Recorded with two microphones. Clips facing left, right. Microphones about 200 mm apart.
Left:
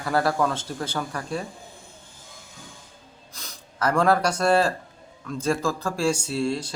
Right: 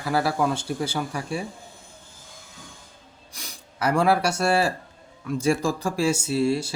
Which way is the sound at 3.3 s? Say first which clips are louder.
Right 1 dB; 10° right (ahead or behind).